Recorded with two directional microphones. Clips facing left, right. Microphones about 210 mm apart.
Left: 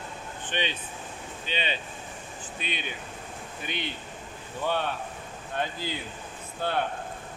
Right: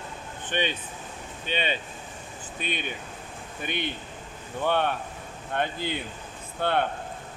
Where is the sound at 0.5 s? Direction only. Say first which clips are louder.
Right 3 dB; 50° right (ahead or behind).